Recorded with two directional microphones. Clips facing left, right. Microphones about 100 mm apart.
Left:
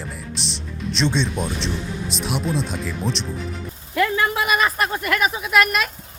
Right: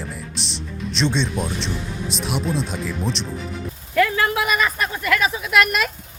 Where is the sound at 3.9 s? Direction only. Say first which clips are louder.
Right 1 dB; 25° left (ahead or behind).